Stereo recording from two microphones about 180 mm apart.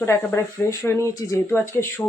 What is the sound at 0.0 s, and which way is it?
Speech, 15° left (ahead or behind).